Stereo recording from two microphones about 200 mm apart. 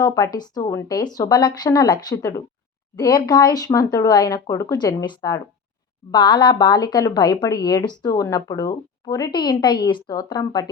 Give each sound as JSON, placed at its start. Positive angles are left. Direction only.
{"t": 0.0, "sound": "speech", "side_deg": 20}